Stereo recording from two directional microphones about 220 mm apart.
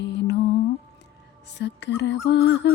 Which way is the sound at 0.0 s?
50° left (ahead or behind).